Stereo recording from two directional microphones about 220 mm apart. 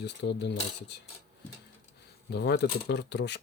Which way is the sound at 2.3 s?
50° left (ahead or behind).